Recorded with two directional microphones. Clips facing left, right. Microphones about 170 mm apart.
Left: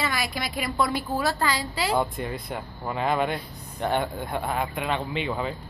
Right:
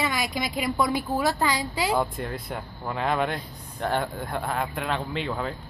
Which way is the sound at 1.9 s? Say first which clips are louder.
Left 1 dB; centre (ahead or behind).